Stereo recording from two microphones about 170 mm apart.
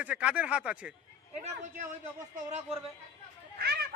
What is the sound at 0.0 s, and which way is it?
Speech, 5° right (ahead or behind).